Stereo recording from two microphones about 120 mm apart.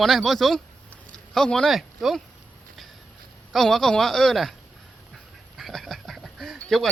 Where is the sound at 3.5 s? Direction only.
Centre (ahead or behind).